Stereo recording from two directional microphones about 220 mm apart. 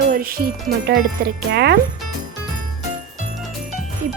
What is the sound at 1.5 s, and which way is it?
Speech, 50° right (ahead or behind).